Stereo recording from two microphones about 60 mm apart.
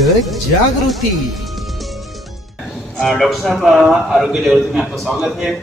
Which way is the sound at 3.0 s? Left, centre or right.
Centre.